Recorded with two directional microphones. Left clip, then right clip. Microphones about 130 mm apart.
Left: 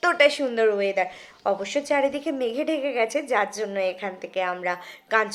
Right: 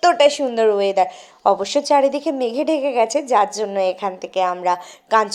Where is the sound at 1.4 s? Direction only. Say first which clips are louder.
Right 8 dB; 40° right (ahead or behind).